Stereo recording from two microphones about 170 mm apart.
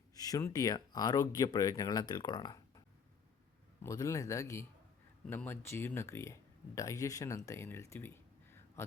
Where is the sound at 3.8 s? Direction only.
20° left (ahead or behind).